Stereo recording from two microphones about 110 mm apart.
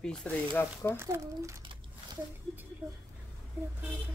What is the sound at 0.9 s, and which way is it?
Speech, 25° right (ahead or behind).